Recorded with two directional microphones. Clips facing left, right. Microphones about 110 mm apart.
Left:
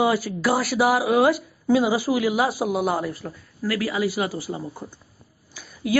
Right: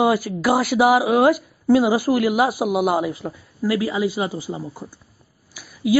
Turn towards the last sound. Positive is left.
turn(degrees=-10)  # may be behind; listen again after turning